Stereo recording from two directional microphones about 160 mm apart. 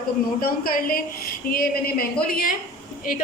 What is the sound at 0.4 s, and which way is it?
A woman's voice, 65° left (ahead or behind).